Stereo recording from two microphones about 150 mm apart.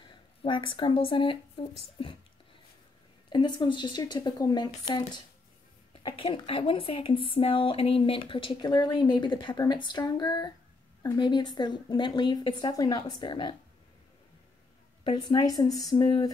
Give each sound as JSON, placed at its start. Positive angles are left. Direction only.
{"t": 0.1, "sound": "speech", "side_deg": 35}
{"t": 3.3, "sound": "a woman's voice", "side_deg": 30}
{"t": 15.0, "sound": "a woman's voice", "side_deg": 25}